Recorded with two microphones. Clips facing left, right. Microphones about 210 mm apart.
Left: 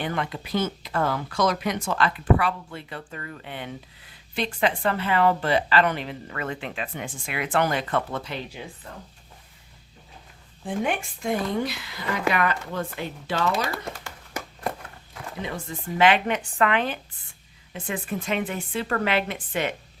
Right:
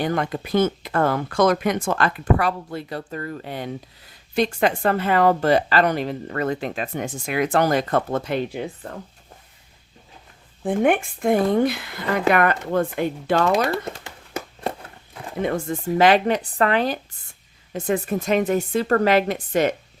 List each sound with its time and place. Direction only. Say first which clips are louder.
0.0 s speech: right 6 dB; 40° right (ahead or behind)
10.6 s speech: right 8 dB; 55° right (ahead or behind)
15.4 s speech: right 10 dB; 50° right (ahead or behind)